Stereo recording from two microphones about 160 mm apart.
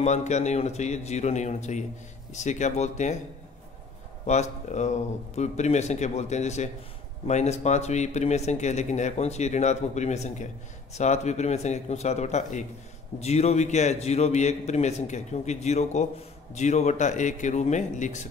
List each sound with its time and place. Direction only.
0.0 s speech: 45° left (ahead or behind)
4.3 s speech: 45° left (ahead or behind)